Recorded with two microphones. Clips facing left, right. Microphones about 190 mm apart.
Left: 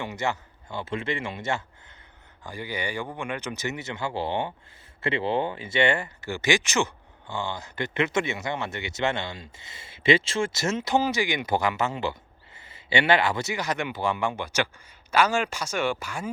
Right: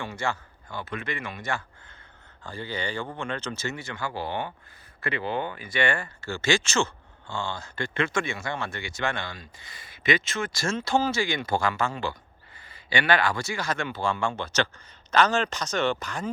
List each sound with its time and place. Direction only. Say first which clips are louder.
0.0 s speech: left 2 dB; 20° left (ahead or behind)